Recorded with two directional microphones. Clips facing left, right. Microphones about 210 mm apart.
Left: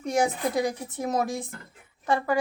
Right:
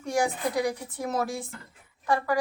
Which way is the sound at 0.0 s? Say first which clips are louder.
Left 2 dB; 20° left (ahead or behind).